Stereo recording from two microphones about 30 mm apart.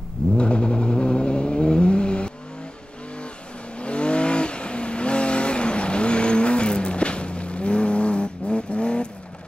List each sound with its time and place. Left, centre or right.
0.4 s vehicle: left
3.8 s vehicle: left